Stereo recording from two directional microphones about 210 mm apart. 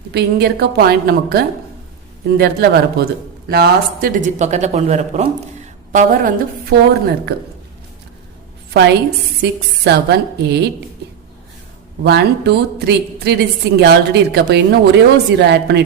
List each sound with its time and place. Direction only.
0.1 s a woman's voice: 50° right (ahead or behind)
4.4 s a woman's voice: 35° right (ahead or behind)
9.4 s a woman's voice: 50° right (ahead or behind)
12.0 s a woman's voice: 50° right (ahead or behind)